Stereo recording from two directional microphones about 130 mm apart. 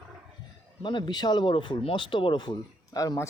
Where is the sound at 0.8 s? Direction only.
35° left (ahead or behind).